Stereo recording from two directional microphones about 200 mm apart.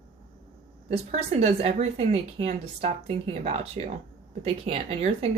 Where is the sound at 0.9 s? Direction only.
30° right (ahead or behind).